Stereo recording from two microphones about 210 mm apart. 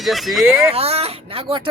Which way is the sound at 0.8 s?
30° right (ahead or behind).